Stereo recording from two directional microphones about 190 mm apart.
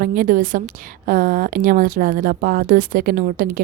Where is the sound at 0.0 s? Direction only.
45° right (ahead or behind).